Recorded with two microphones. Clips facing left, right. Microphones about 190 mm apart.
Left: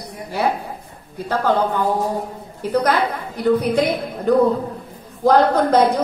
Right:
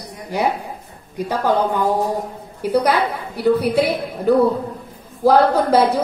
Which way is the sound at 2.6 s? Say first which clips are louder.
Right 1 dB; 10° right (ahead or behind).